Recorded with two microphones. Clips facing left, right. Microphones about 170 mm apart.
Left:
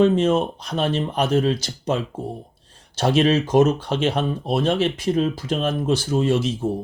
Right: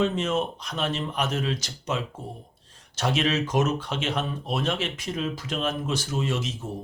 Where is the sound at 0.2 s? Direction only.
30° left (ahead or behind).